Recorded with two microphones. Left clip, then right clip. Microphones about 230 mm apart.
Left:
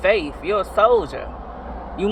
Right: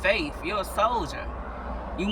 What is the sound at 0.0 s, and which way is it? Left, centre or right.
Speech, centre.